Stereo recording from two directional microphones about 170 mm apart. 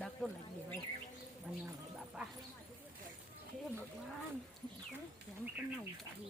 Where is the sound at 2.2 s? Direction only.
5° right (ahead or behind).